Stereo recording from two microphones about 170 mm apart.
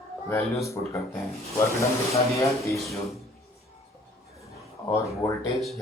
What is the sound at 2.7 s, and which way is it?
Speech, centre (ahead or behind).